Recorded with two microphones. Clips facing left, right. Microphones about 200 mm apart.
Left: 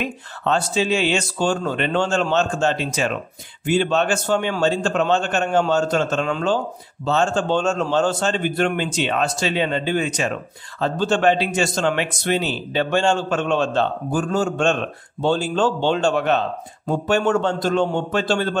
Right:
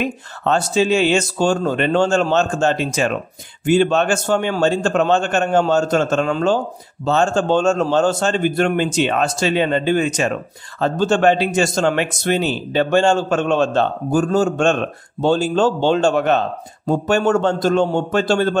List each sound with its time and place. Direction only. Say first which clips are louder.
0.0 s a man's voice: right 4 dB; 45° right (ahead or behind)